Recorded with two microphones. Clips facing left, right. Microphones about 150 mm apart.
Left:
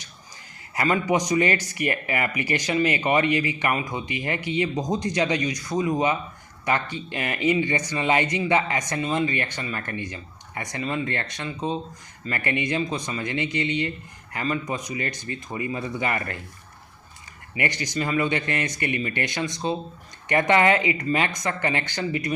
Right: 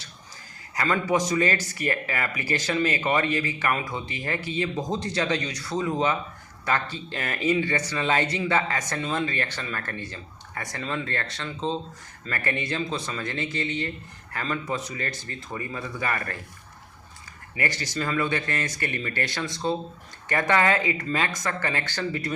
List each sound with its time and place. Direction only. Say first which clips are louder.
0.9 s speech: left 2 dB; 15° left (ahead or behind)
17.6 s speech: left 2 dB; 20° left (ahead or behind)